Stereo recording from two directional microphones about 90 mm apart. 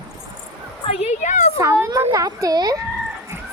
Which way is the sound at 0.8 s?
60° left (ahead or behind).